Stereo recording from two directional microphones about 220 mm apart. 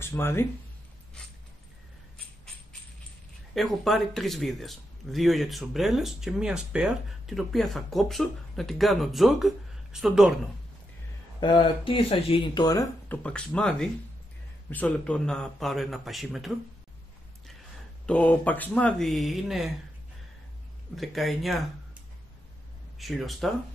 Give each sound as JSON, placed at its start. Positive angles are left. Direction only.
{"t": 0.0, "sound": "speech", "side_deg": 10}
{"t": 3.5, "sound": "a man's voice", "side_deg": 0}
{"t": 11.3, "sound": "a man's voice", "side_deg": 20}
{"t": 18.0, "sound": "a man's voice", "side_deg": 5}
{"t": 20.9, "sound": "a man's voice", "side_deg": 0}
{"t": 22.9, "sound": "a man's voice", "side_deg": 0}